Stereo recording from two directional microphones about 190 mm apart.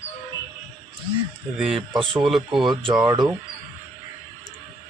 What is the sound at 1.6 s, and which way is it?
Speech, 5° right (ahead or behind).